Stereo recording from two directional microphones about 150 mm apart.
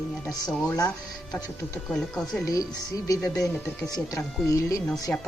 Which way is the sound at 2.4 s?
20° left (ahead or behind).